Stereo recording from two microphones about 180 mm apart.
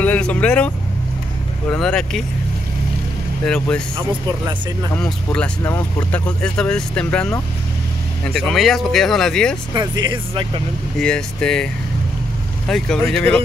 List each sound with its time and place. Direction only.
0.0 s speech: 10° left (ahead or behind)
1.7 s speech: 5° left (ahead or behind)
3.4 s speech: 5° left (ahead or behind)
4.9 s speech: 5° left (ahead or behind)
9.8 s speech: 25° right (ahead or behind)
11.0 s speech: 5° left (ahead or behind)